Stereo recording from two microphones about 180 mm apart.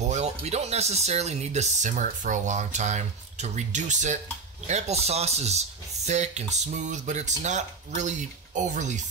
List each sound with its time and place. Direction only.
0.0 s speech: 40° right (ahead or behind)